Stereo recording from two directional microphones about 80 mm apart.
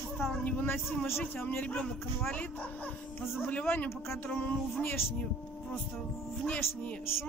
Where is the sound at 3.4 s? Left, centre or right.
Left.